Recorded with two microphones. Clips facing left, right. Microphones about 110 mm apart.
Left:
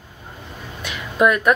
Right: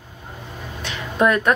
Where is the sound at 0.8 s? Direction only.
30° right (ahead or behind).